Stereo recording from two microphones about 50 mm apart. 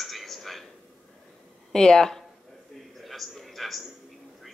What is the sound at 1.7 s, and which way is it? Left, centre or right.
Speech, centre.